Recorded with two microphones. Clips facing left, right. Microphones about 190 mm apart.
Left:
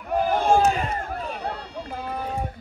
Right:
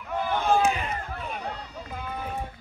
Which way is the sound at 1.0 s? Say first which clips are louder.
Left 4 dB; 35° left (ahead or behind).